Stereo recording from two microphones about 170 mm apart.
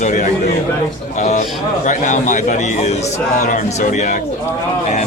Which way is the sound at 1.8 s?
45° left (ahead or behind).